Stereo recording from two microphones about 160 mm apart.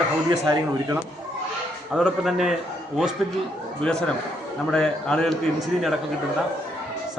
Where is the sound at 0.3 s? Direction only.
20° right (ahead or behind).